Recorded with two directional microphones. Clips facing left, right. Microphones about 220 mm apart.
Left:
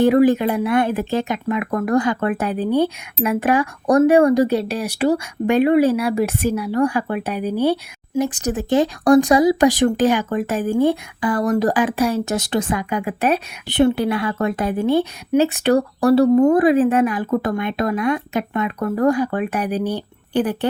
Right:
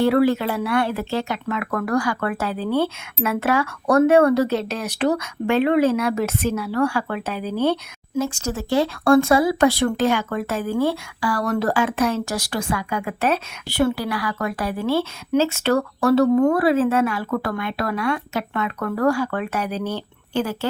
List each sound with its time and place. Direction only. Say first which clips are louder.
0.0 s speech: left 4 dB; 15° left (ahead or behind)